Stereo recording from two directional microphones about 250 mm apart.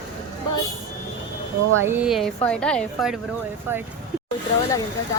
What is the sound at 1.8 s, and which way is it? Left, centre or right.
Speech, centre.